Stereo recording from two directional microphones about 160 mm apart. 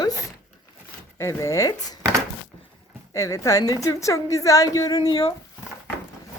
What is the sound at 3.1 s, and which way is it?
A woman's voice, 20° left (ahead or behind).